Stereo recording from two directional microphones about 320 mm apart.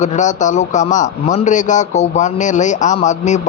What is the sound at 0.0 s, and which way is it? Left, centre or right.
A man's voice, left.